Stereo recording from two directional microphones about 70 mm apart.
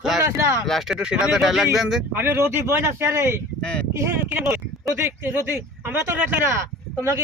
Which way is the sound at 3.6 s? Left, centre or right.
Centre.